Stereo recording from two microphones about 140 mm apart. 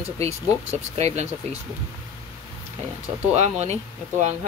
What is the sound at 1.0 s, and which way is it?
Speech, 50° right (ahead or behind).